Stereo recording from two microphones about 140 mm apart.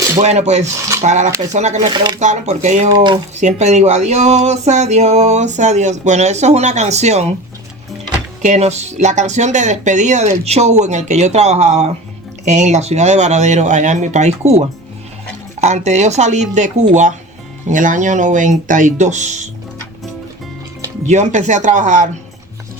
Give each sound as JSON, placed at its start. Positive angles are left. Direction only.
{"t": 0.2, "sound": "speech", "side_deg": -55}
{"t": 2.9, "sound": "speech", "side_deg": -35}
{"t": 3.3, "sound": "speech", "side_deg": -55}
{"t": 8.4, "sound": "speech", "side_deg": -50}
{"t": 15.6, "sound": "speech", "side_deg": -55}
{"t": 21.1, "sound": "speech", "side_deg": -55}